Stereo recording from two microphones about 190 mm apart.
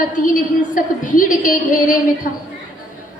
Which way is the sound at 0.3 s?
45° left (ahead or behind).